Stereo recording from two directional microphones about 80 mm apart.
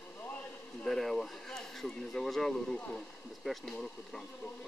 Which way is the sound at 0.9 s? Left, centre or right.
Centre.